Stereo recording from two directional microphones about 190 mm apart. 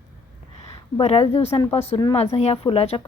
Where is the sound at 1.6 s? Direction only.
10° left (ahead or behind).